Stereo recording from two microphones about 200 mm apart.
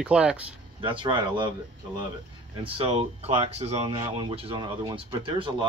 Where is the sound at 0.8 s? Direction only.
25° right (ahead or behind).